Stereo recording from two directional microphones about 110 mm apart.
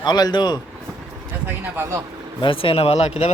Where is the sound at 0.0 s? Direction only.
40° left (ahead or behind).